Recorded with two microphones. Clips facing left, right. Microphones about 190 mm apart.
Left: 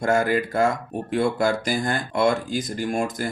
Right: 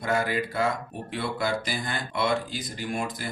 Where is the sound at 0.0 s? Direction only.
45° left (ahead or behind).